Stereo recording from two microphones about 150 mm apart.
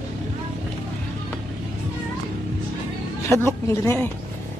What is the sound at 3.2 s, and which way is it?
Speech, 15° left (ahead or behind).